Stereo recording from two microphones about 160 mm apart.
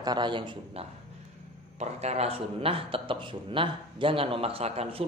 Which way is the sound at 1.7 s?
45° right (ahead or behind).